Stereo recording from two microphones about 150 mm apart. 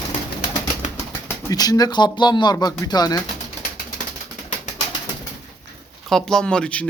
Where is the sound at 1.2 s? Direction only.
25° left (ahead or behind).